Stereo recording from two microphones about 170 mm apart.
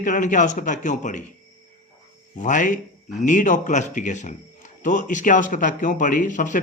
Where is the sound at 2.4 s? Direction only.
50° left (ahead or behind).